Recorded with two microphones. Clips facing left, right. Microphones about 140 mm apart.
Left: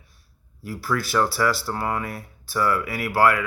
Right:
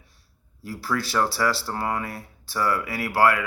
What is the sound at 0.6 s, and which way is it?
Speech, 35° right (ahead or behind).